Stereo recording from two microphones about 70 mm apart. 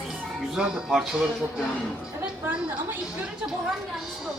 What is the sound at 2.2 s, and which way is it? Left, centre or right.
Speech, right.